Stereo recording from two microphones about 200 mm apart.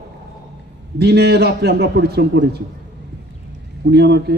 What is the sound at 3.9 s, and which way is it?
Speech, 55° right (ahead or behind).